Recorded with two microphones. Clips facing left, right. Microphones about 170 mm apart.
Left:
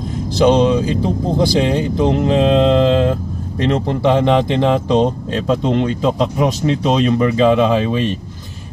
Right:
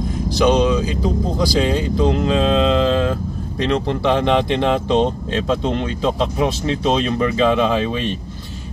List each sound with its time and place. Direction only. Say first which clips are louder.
0.4 s speech: left 3 dB; 25° left (ahead or behind)